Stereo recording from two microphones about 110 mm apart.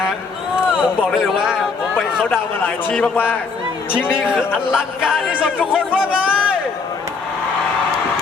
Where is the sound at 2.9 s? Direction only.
15° left (ahead or behind).